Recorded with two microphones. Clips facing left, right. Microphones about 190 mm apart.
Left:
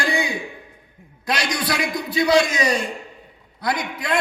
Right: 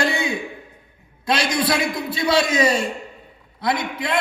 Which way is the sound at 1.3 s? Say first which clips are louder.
Right 3 dB; 30° right (ahead or behind).